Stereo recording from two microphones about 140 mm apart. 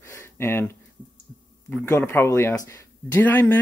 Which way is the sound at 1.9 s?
15° left (ahead or behind).